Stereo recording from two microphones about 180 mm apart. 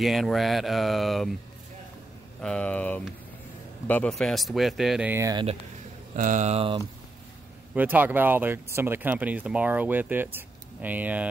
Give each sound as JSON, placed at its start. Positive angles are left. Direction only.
{"t": 0.0, "sound": "a man's voice", "side_deg": 0}
{"t": 2.4, "sound": "a man's voice", "side_deg": 5}
{"t": 6.1, "sound": "speech", "side_deg": -45}
{"t": 7.7, "sound": "speech", "side_deg": -10}